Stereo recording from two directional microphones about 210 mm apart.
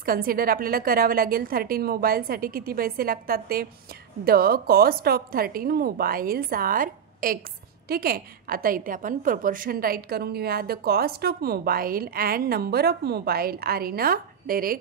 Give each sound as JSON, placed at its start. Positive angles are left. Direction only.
{"t": 0.0, "sound": "a woman's voice", "side_deg": -45}